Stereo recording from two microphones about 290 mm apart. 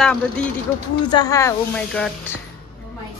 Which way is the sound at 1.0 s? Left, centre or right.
Centre.